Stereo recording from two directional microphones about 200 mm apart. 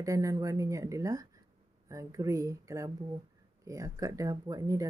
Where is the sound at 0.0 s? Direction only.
15° right (ahead or behind).